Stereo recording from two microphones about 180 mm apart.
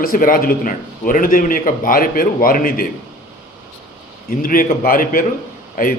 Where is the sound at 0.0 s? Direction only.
50° left (ahead or behind).